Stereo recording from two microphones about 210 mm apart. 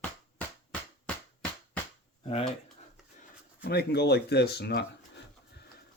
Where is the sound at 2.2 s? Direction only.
25° left (ahead or behind).